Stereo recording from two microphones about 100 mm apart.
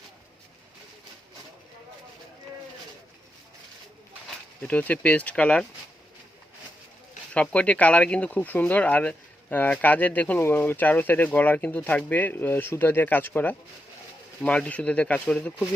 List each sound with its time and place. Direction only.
4.6 s speech: 15° left (ahead or behind)
7.5 s speech: 15° left (ahead or behind)